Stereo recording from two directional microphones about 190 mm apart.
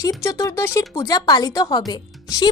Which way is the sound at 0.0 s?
15° left (ahead or behind).